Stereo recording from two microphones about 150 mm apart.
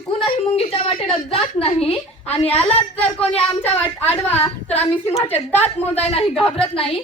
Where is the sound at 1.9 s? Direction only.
45° left (ahead or behind).